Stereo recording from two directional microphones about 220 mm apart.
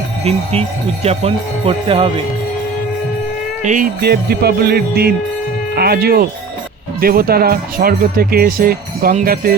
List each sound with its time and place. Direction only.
1.0 s jingle bell: 30° right (ahead or behind)
3.6 s speech: 35° right (ahead or behind)